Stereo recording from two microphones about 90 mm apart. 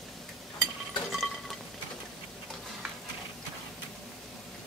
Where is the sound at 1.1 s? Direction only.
Centre (ahead or behind).